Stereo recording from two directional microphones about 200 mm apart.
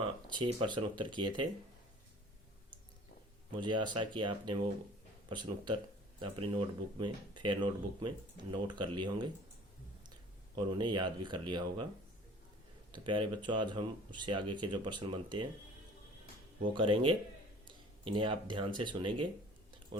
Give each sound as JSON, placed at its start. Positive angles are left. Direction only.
{"t": 0.0, "sound": "speech", "side_deg": -25}
{"t": 3.6, "sound": "speech", "side_deg": -25}
{"t": 10.5, "sound": "speech", "side_deg": -20}
{"t": 12.9, "sound": "speech", "side_deg": -25}
{"t": 16.7, "sound": "speech", "side_deg": -25}